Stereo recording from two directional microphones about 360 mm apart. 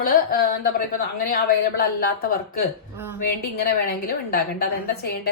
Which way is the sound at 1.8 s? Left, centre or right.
Left.